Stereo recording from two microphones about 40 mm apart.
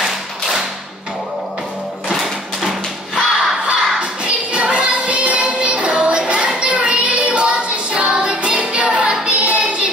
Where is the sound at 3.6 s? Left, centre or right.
Right.